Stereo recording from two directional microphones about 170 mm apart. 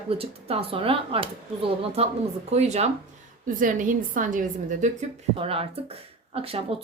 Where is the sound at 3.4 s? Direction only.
50° right (ahead or behind).